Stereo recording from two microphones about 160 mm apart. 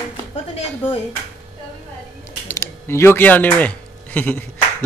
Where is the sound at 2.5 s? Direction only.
15° left (ahead or behind).